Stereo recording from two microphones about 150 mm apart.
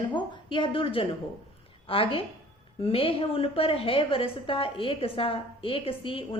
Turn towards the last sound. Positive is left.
turn(degrees=40)  # may be behind; listen again after turning